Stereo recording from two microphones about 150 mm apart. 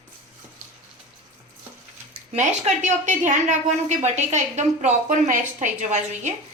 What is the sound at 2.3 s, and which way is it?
A woman's voice, 50° right (ahead or behind).